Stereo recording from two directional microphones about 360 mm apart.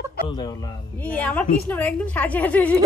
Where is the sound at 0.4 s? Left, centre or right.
Centre.